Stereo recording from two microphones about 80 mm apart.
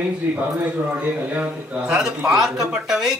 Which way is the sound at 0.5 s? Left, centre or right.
Centre.